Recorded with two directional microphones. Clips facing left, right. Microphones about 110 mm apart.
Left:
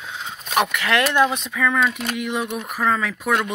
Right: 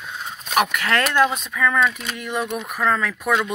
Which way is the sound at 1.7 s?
15° left (ahead or behind).